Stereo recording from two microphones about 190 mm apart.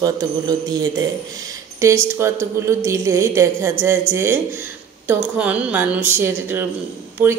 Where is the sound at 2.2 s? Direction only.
15° right (ahead or behind).